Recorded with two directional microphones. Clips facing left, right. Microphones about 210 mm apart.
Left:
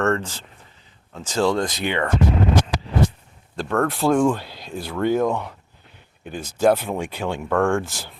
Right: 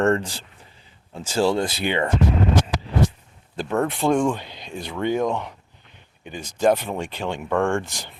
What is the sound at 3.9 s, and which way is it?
Speech, centre (ahead or behind).